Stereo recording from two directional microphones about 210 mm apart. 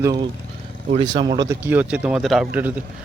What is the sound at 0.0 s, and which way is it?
A man's voice, 20° right (ahead or behind).